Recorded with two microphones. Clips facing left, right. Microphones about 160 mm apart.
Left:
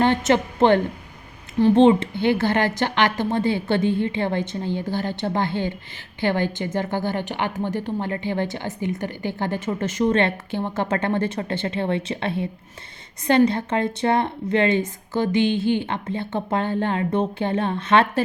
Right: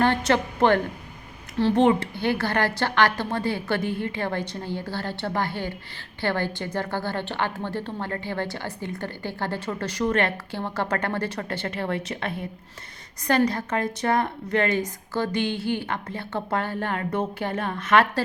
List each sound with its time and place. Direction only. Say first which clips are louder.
0.0 s a woman's voice: left 3 dB; 20° left (ahead or behind)